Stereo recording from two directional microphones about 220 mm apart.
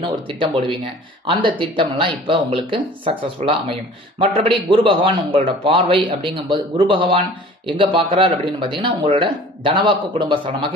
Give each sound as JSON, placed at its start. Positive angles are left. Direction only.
{"t": 0.0, "sound": "a man's voice", "side_deg": -25}